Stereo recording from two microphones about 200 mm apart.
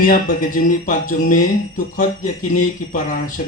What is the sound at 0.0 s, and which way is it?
Speech, 45° left (ahead or behind).